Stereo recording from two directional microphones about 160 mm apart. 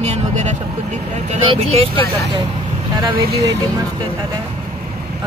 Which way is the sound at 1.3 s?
40° right (ahead or behind).